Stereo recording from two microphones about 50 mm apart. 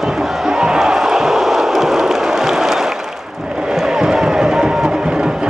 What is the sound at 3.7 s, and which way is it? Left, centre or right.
Music, centre.